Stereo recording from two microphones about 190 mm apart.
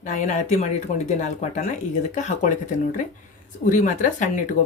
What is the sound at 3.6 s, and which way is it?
Speech, 40° left (ahead or behind).